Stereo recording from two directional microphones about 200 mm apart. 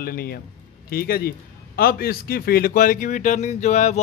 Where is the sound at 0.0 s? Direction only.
50° left (ahead or behind).